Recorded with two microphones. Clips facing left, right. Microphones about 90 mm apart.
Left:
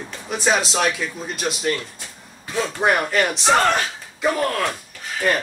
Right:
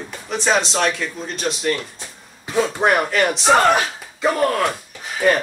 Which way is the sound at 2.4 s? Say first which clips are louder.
Right 5 dB; 15° right (ahead or behind).